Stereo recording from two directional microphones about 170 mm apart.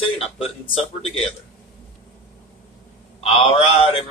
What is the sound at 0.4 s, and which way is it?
Speech, 35° left (ahead or behind).